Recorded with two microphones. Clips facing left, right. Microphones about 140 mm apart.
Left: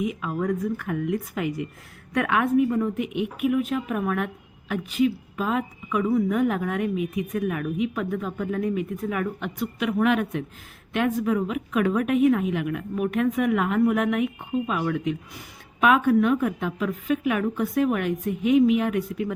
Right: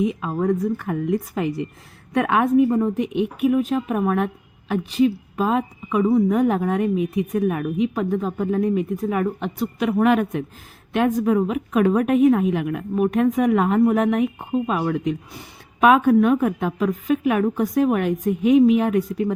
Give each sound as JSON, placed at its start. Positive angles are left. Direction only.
{"t": 0.0, "sound": "a woman's voice", "side_deg": -30}
{"t": 15.8, "sound": "a woman's voice", "side_deg": -45}